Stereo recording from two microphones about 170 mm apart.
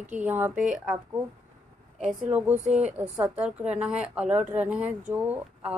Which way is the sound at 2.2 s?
10° right (ahead or behind).